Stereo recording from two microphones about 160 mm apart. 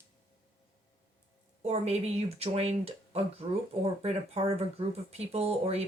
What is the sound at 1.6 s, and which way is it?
Speech, 40° right (ahead or behind).